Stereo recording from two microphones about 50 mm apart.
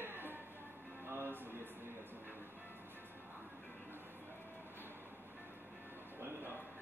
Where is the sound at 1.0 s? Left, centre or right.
Right.